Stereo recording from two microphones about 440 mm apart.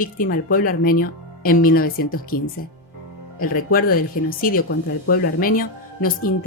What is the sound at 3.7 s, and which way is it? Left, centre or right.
Speech, centre.